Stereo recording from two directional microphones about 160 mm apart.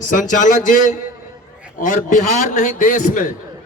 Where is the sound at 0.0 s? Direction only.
55° left (ahead or behind).